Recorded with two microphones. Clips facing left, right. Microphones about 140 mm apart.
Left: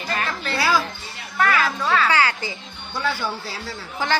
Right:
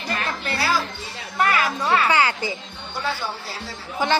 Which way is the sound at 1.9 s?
20° right (ahead or behind).